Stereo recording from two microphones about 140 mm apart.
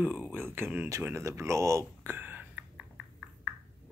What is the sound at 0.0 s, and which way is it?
Speech, 10° right (ahead or behind).